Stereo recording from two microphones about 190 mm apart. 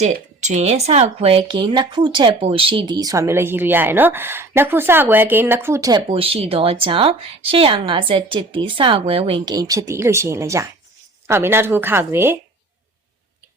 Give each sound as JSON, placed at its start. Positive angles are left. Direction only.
{"t": 0.0, "sound": "speech", "side_deg": -35}
{"t": 6.1, "sound": "speech", "side_deg": -30}